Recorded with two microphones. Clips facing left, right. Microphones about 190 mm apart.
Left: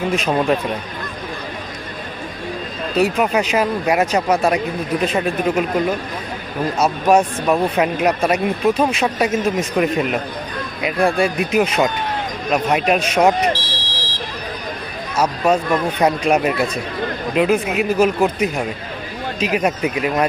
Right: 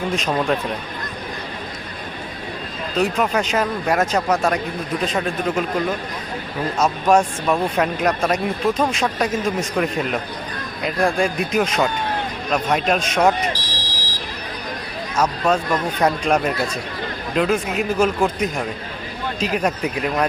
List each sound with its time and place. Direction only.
0.1 s speech: 10° left (ahead or behind)
3.0 s speech: 10° left (ahead or behind)
6.7 s speech: 10° left (ahead or behind)
13.5 s fire alarm: 10° right (ahead or behind)
15.1 s speech: 10° left (ahead or behind)